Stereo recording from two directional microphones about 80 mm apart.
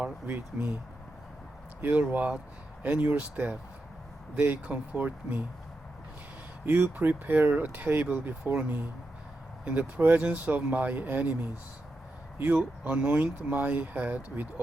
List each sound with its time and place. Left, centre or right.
0.0 s speech: right
1.8 s speech: centre
6.7 s speech: right
9.6 s speech: right
12.4 s speech: right